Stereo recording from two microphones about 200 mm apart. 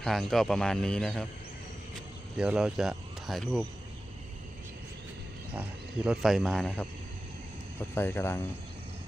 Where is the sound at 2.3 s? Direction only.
5° right (ahead or behind).